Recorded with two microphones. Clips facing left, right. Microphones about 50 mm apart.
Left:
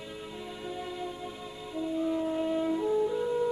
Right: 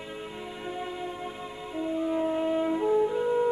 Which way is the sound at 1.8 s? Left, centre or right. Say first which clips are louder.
Right 2 dB; right.